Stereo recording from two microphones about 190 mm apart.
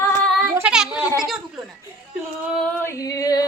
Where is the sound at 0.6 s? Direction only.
5° right (ahead or behind).